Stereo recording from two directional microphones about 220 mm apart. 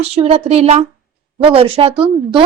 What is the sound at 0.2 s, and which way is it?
A woman's voice, 25° right (ahead or behind).